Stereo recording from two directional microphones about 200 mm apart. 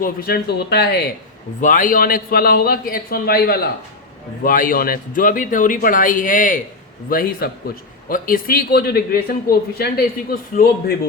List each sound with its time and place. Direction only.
0.0 s a man's voice: 50° left (ahead or behind)
1.6 s a man's voice: 40° left (ahead or behind)